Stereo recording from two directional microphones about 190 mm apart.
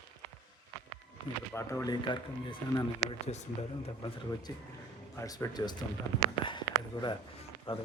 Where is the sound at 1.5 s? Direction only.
15° left (ahead or behind).